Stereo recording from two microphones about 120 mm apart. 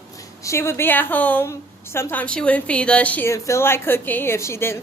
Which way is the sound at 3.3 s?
25° left (ahead or behind).